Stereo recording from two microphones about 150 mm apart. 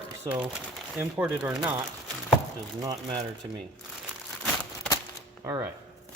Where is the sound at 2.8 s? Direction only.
25° right (ahead or behind).